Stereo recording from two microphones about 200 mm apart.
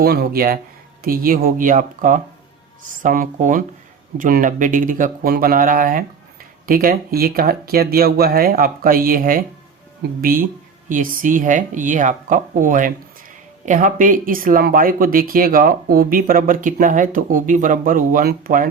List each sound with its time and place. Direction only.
0.0 s speech: 50° right (ahead or behind)